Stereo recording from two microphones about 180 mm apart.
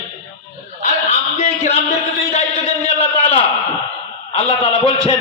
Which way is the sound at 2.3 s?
35° left (ahead or behind).